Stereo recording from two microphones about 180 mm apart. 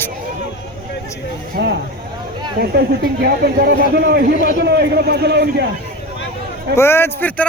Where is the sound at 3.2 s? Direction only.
60° right (ahead or behind).